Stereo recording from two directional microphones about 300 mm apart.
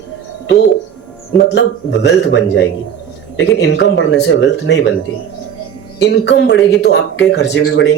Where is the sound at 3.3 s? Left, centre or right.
Left.